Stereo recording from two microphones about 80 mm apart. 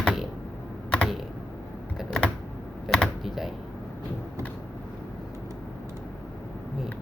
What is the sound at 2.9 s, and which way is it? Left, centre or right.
Computer keyboard, centre.